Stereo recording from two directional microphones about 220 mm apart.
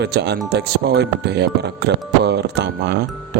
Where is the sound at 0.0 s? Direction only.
50° right (ahead or behind).